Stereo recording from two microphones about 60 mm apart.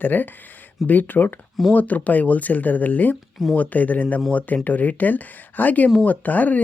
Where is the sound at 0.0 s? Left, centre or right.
Left.